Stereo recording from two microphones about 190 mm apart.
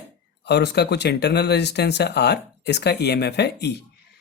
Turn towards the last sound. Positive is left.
turn(degrees=60)  # may be behind; listen again after turning